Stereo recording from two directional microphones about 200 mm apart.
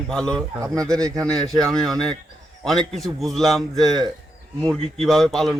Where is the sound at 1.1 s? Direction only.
5° left (ahead or behind).